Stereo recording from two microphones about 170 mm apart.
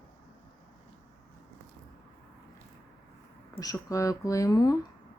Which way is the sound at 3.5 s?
20° left (ahead or behind).